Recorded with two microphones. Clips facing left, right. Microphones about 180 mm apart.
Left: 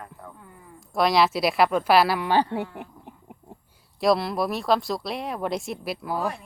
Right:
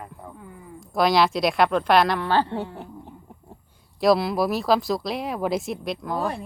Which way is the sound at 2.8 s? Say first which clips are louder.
Right 2 dB; 15° left (ahead or behind).